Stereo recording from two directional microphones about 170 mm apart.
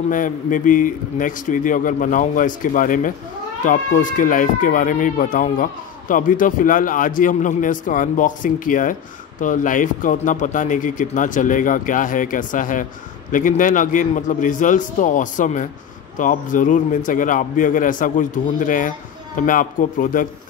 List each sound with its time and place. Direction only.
0.1 s speech: 50° left (ahead or behind)